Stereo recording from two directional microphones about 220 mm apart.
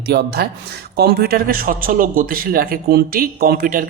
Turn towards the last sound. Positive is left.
turn(degrees=-40)  # may be behind; listen again after turning